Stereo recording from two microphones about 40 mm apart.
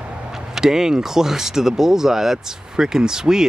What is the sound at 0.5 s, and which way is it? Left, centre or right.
Speech, centre.